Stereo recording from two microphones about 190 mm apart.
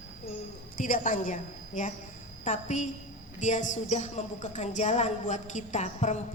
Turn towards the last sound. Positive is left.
turn(degrees=40)  # may be behind; listen again after turning